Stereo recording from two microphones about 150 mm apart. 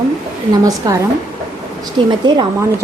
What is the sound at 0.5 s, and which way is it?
Speech, 25° right (ahead or behind).